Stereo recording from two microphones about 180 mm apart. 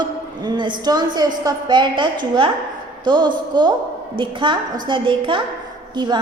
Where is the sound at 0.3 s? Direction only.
25° right (ahead or behind).